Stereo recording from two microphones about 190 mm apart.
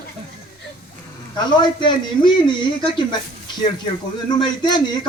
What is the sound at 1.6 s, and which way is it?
A man's voice, 25° left (ahead or behind).